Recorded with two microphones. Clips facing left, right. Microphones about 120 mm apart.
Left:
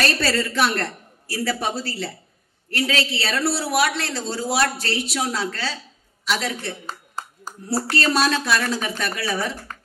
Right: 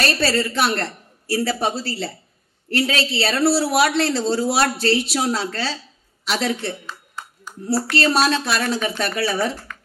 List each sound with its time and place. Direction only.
0.0 s a woman's voice: 30° right (ahead or behind)
6.9 s a sound: 40° left (ahead or behind)
7.7 s speech: 25° left (ahead or behind)
8.0 s a woman's voice: 25° right (ahead or behind)